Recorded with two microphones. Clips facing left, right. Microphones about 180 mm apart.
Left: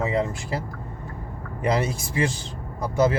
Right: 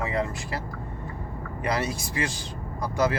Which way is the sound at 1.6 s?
25° left (ahead or behind).